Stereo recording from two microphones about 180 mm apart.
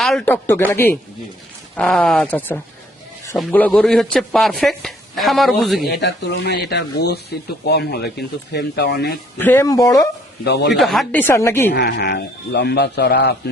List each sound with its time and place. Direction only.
0.0 s speech: centre (ahead or behind)
0.4 s speech: 15° left (ahead or behind)
5.9 s speech: 70° left (ahead or behind)
9.4 s speech: 10° left (ahead or behind)
10.4 s speech: 70° left (ahead or behind)
10.7 s speech: centre (ahead or behind)
11.2 s speech: 15° left (ahead or behind)
11.7 s speech: 70° left (ahead or behind)